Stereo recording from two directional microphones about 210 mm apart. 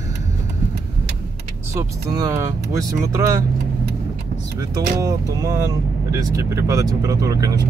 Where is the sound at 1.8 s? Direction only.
15° right (ahead or behind).